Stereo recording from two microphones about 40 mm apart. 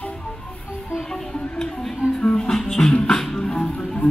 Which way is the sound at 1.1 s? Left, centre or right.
Centre.